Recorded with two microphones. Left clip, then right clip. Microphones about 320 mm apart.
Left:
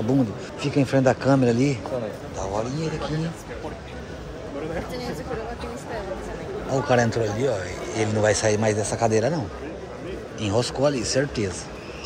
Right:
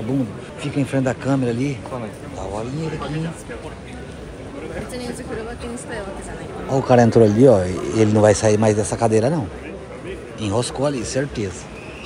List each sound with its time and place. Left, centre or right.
0.6 s speech: centre
6.7 s speech: centre
10.4 s speech: centre